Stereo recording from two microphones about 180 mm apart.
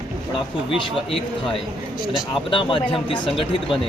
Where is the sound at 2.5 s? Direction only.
30° left (ahead or behind).